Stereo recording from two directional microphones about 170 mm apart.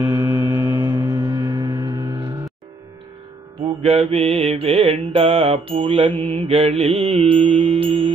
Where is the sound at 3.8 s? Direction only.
35° right (ahead or behind).